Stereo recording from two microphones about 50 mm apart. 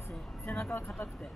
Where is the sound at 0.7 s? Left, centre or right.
Left.